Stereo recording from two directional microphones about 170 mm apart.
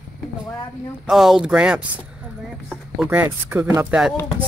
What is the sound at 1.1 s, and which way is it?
Speech, centre (ahead or behind).